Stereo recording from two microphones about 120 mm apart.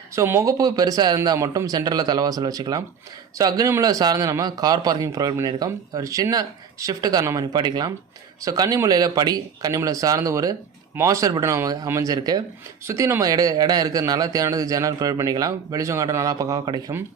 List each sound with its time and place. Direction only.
0.2 s a man's voice: 25° right (ahead or behind)